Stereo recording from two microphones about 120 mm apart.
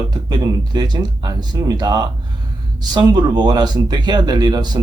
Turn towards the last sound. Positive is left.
turn(degrees=-35)  # may be behind; listen again after turning